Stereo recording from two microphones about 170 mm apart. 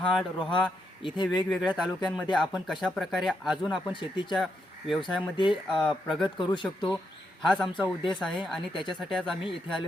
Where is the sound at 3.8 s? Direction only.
25° left (ahead or behind).